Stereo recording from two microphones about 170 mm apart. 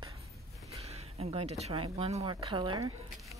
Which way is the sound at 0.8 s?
35° right (ahead or behind).